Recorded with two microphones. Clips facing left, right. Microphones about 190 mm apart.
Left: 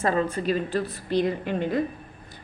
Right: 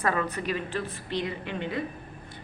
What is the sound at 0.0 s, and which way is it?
A woman's voice, 30° left (ahead or behind).